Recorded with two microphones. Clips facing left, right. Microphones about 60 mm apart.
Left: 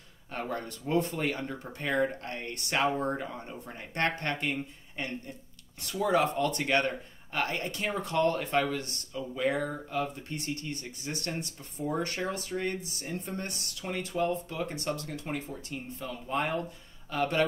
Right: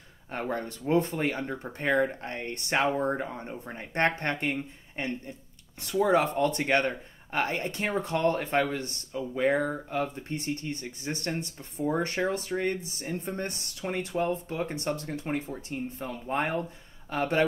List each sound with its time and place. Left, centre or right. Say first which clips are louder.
0.3 s speech: right 3 dB; right